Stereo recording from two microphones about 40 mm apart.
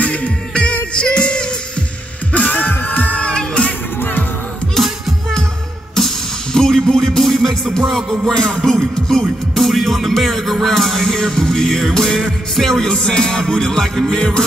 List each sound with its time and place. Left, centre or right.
0.0 s music: left
0.9 s music: left
2.5 s music: left
3.2 s music: left
4.0 s music: left
4.7 s music: centre
5.9 s music: centre
8.3 s music: centre
9.2 s music: centre; by 14.4 s left